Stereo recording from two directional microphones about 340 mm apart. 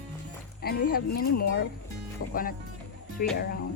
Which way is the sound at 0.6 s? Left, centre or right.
Left.